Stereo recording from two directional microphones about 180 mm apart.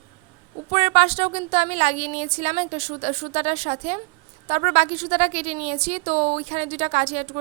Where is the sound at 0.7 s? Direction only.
35° right (ahead or behind).